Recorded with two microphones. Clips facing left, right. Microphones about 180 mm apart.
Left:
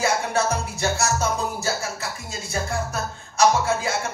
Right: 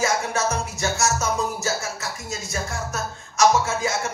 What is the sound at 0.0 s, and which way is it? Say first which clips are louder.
Music: left 1 dB; 35° left (ahead or behind).